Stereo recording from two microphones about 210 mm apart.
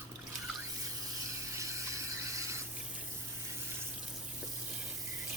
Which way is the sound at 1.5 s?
15° right (ahead or behind).